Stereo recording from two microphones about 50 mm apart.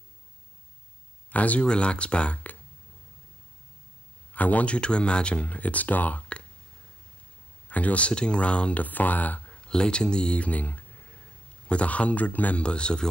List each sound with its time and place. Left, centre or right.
1.3 s speech: left
4.3 s speech: left
7.6 s speech: left
9.6 s speech: centre; by 12.6 s left
12.6 s speech: centre